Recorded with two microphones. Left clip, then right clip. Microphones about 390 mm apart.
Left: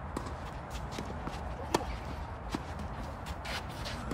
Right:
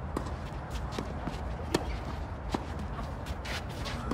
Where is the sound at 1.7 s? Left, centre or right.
Centre.